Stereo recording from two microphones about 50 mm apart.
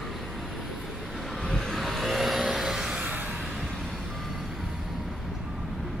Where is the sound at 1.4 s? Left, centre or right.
Centre.